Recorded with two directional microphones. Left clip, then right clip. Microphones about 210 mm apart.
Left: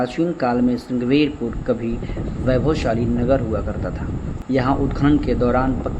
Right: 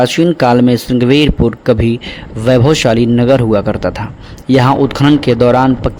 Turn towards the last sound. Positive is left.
turn(degrees=-55)  # may be behind; listen again after turning